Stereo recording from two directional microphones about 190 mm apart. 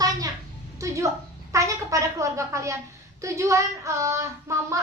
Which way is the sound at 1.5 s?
15° right (ahead or behind).